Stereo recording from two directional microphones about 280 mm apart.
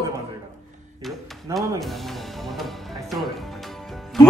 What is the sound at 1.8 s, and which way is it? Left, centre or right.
Music, centre.